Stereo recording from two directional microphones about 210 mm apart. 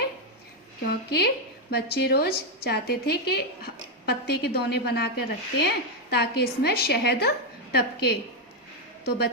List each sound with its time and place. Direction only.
0.9 s a woman's voice: 50° left (ahead or behind)
9.0 s a woman's voice: 50° left (ahead or behind)